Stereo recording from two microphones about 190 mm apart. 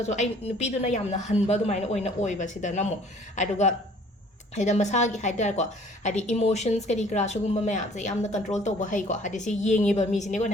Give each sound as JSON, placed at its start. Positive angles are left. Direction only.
{"t": 0.0, "sound": "a woman's voice", "side_deg": 35}